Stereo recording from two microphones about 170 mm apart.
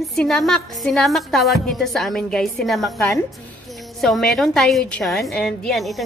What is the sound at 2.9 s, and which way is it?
Speech, 15° left (ahead or behind).